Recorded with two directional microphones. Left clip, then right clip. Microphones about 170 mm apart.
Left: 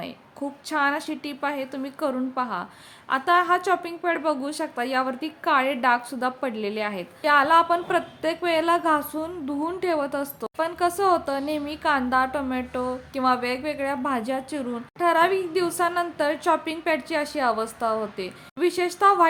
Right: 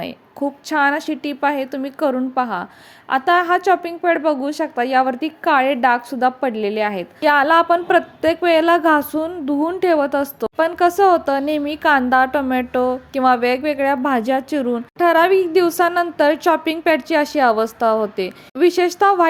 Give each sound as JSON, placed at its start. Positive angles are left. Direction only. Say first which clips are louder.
{"t": 0.0, "sound": "a woman's voice", "louder": "right 9 dB", "side_deg": -30}